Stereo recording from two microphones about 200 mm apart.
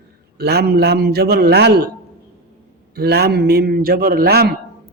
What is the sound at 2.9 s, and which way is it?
A man's voice, 50° right (ahead or behind).